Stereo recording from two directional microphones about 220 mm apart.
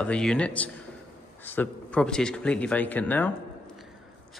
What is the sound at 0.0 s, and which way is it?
Speech, 5° left (ahead or behind).